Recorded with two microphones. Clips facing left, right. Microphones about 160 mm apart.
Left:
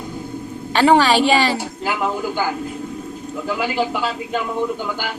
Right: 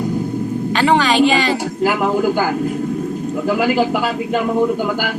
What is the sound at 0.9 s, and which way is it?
Speech, 35° left (ahead or behind).